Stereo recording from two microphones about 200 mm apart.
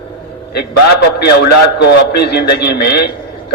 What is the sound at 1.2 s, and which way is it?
A man's voice, 55° left (ahead or behind).